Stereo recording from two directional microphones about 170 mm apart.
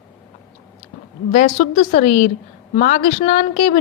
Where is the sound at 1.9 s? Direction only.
45° left (ahead or behind).